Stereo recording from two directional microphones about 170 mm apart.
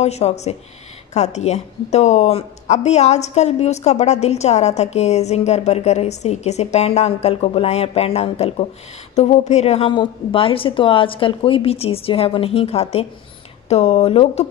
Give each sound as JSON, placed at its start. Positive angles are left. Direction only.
{"t": 0.0, "sound": "a woman's voice", "side_deg": 40}